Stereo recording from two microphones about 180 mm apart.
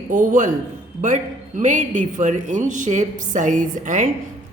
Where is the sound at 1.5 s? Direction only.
45° right (ahead or behind).